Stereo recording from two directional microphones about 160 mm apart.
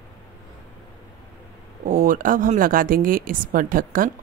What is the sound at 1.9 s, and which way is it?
Speech, 60° right (ahead or behind).